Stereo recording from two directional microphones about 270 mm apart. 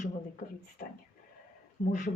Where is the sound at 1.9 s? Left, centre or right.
Left.